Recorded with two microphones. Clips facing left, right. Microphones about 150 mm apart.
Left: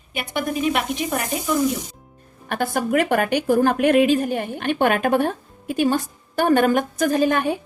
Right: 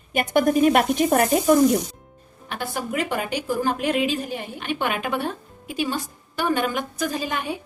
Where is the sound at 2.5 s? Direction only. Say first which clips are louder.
Left 7 dB; 50° left (ahead or behind).